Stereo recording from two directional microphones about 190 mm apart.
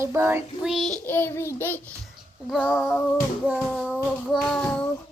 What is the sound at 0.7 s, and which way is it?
Child singing, centre (ahead or behind).